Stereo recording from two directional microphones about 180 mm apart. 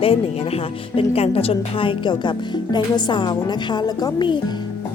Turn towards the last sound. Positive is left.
turn(degrees=25)  # may be behind; listen again after turning